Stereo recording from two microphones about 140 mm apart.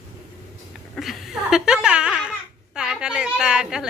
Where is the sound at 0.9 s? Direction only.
Centre (ahead or behind).